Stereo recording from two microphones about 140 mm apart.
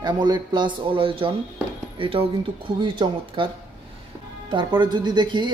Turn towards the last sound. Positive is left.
turn(degrees=-30)  # may be behind; listen again after turning